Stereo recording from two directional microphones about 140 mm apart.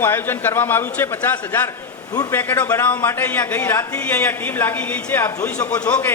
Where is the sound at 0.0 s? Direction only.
15° left (ahead or behind).